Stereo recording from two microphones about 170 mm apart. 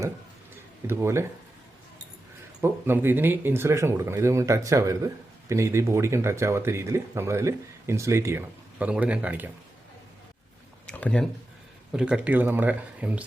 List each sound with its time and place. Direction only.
0.9 s speech: 15° right (ahead or behind)
2.6 s speech: 15° right (ahead or behind)
10.8 s a sound: 5° left (ahead or behind)
11.9 s speech: 5° right (ahead or behind)